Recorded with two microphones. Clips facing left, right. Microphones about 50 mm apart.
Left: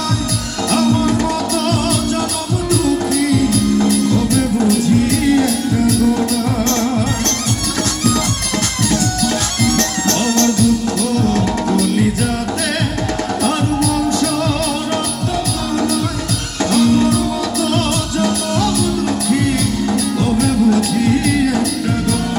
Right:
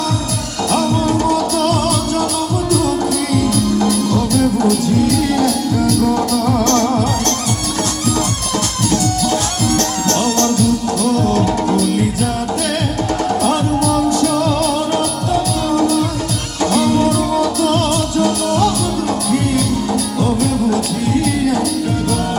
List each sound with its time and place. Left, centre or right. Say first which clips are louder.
1.3 s music: right 2 dB; left
3.8 s music: left 1 dB; right
4.7 s music: even; left
10.4 s music: left 3 dB; left
16.7 s music: left 1 dB; right
20.4 s music: left 2 dB; left